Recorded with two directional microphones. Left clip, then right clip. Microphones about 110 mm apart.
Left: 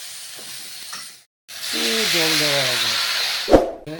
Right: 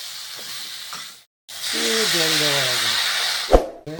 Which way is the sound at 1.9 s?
Centre (ahead or behind).